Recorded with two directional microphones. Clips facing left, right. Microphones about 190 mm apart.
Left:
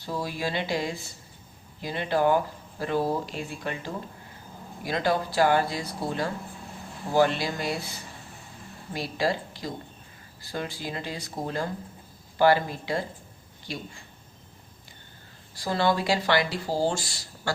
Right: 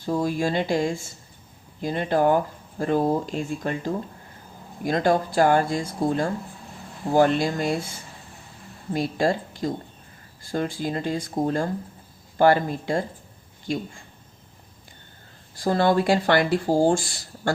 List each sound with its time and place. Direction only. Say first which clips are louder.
0.0 s speech: right 7 dB; 50° right (ahead or behind)
15.5 s speech: right 5 dB; 50° right (ahead or behind)